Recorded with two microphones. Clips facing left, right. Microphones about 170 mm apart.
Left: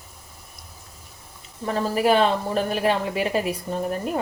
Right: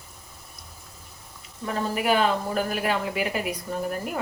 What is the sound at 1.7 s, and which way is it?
A woman's voice, 30° left (ahead or behind).